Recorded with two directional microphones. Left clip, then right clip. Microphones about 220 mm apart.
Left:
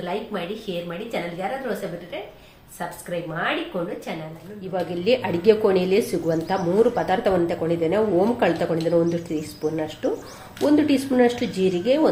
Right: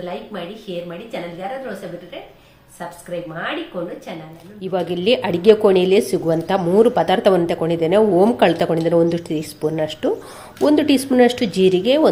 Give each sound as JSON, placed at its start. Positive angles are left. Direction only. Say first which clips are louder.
{"t": 0.9, "sound": "a woman's voice", "louder": "even", "side_deg": 5}
{"t": 3.1, "sound": "a woman's voice", "louder": "even", "side_deg": 5}
{"t": 4.6, "sound": "a woman's voice", "louder": "right 5 dB", "side_deg": -40}